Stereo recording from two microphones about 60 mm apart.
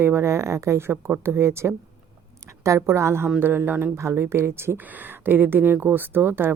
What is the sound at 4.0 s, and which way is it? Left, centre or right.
Speech, right.